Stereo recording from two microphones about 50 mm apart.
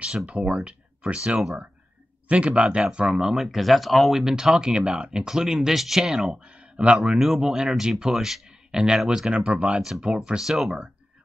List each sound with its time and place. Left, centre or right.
0.3 s speech: right
3.5 s speech: centre
4.2 s speech: centre
7.2 s speech: centre
9.3 s speech: right
9.8 s speech: centre
10.0 s speech: centre
10.4 s speech: centre